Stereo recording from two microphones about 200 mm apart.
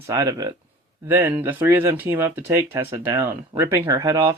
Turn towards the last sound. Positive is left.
turn(degrees=-15)  # may be behind; listen again after turning